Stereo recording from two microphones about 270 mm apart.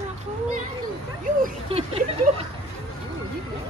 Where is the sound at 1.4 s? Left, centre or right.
Right.